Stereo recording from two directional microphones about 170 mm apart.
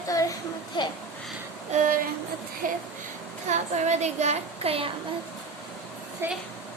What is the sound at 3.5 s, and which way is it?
Speech, 40° right (ahead or behind).